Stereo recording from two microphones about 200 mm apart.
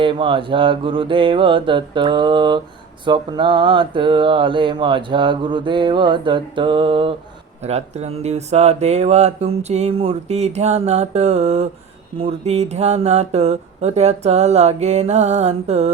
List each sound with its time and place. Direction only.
0.0 s speech: 25° right (ahead or behind)